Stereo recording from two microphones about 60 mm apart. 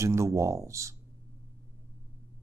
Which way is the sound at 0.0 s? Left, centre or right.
Right.